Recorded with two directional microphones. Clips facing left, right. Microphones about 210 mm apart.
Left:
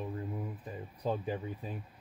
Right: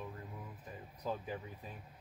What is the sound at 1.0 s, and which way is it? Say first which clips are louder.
Speech: left 6 dB; 30° left (ahead or behind).